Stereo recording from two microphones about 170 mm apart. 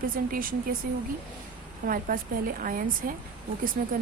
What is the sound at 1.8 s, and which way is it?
A woman's voice, 55° right (ahead or behind).